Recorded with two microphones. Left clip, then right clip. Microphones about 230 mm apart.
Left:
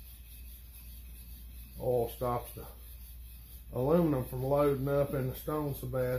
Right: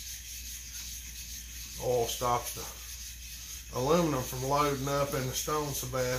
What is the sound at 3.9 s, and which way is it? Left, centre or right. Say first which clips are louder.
Speech: right 1 dB; centre.